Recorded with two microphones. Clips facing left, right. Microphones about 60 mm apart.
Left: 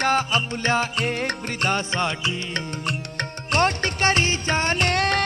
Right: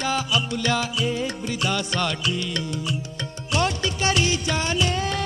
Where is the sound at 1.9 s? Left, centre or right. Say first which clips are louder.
Even; left.